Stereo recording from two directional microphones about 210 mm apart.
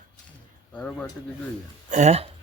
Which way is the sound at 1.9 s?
35° right (ahead or behind).